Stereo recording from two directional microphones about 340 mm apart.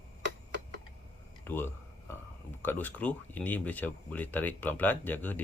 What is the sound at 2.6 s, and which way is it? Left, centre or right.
Speech, centre.